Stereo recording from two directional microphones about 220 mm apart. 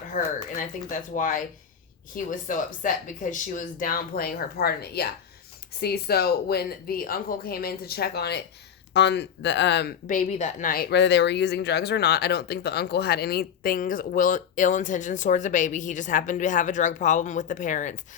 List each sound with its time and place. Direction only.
0.5 s speech: 35° left (ahead or behind); by 9.9 s 50° left (ahead or behind)
10.1 s speech: 35° left (ahead or behind)